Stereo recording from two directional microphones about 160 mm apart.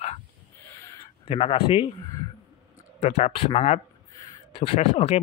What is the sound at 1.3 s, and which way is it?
Speech, 35° left (ahead or behind).